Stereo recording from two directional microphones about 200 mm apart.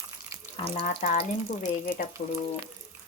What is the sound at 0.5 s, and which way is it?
Speech, 25° left (ahead or behind).